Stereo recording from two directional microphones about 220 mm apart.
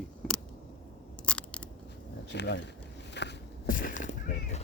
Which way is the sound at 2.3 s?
50° left (ahead or behind).